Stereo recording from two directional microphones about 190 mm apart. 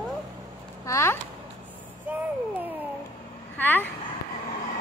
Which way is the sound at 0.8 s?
15° left (ahead or behind).